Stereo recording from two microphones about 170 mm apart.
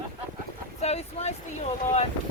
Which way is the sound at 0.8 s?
40° left (ahead or behind).